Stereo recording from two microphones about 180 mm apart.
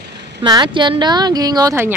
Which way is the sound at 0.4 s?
25° right (ahead or behind).